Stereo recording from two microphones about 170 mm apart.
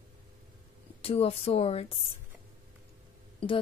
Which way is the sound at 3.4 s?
35° left (ahead or behind).